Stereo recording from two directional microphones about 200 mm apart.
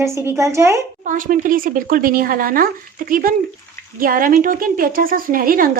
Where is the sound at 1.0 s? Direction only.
40° right (ahead or behind).